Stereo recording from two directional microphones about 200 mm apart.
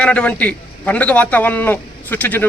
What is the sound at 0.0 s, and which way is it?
A man's voice, 5° left (ahead or behind).